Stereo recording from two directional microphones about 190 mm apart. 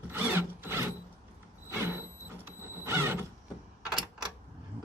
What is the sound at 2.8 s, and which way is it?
Mechanisms, 10° right (ahead or behind).